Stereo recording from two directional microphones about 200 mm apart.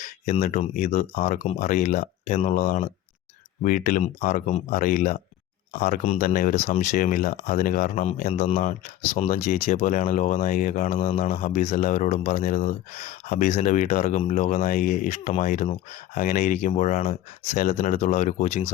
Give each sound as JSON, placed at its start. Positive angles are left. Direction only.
{"t": 0.0, "sound": "speech", "side_deg": 40}